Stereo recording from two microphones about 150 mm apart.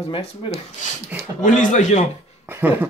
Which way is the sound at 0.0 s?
40° left (ahead or behind).